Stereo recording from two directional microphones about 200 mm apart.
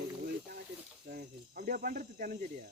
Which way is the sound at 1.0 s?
45° right (ahead or behind).